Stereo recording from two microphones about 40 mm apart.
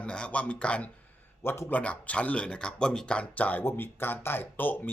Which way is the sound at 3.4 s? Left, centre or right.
Left.